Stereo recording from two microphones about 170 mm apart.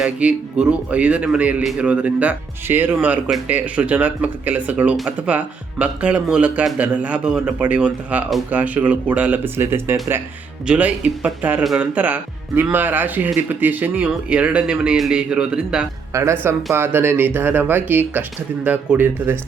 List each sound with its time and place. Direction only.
0.0 s speech: 5° right (ahead or behind)
16.1 s speech: 20° right (ahead or behind)